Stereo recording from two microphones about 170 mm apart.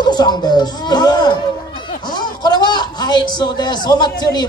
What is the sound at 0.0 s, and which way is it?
A man's voice, 25° left (ahead or behind).